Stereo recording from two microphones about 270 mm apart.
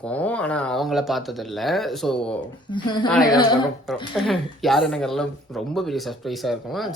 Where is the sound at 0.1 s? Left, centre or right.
Centre.